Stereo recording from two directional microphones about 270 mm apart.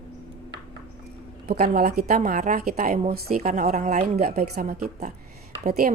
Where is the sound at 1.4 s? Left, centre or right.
Right.